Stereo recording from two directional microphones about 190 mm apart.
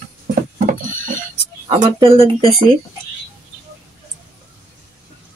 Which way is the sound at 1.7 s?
30° right (ahead or behind).